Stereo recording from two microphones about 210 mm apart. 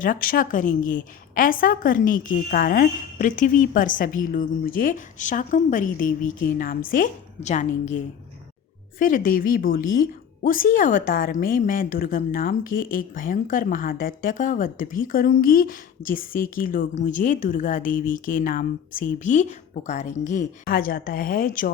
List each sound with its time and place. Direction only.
0.0 s a woman's voice: 40° left (ahead or behind)